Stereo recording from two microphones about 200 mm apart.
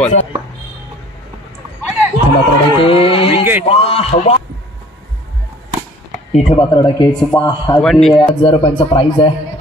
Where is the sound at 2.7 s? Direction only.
25° left (ahead or behind).